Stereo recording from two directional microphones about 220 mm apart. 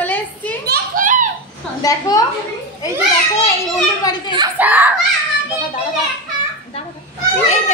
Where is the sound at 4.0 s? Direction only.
20° left (ahead or behind).